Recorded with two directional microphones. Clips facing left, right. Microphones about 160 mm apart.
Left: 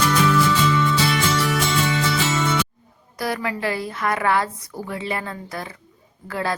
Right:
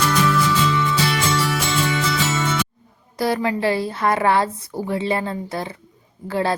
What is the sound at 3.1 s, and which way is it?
A woman's voice, 30° right (ahead or behind).